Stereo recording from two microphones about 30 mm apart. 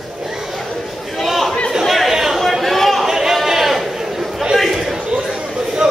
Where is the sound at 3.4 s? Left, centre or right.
Centre.